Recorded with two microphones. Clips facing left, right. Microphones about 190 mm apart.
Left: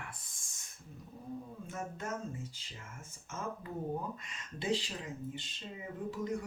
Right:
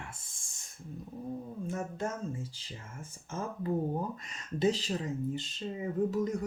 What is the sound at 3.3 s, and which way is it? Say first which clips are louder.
Speech: right 5 dB; 35° right (ahead or behind).